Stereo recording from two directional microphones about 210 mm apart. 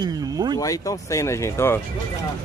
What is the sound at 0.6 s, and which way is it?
Speech, 15° left (ahead or behind).